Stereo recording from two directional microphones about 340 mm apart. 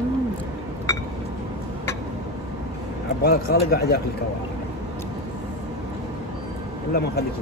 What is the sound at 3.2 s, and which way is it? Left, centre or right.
Speech, left.